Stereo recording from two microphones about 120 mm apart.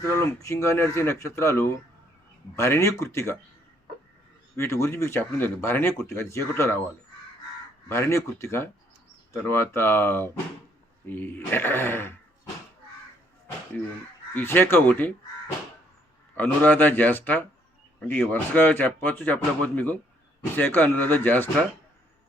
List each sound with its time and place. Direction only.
0.0 s speech: 25° left (ahead or behind)
4.5 s speech: 25° left (ahead or behind)
7.9 s speech: 20° left (ahead or behind)
14.3 s speech: 15° left (ahead or behind)
16.3 s speech: 15° left (ahead or behind)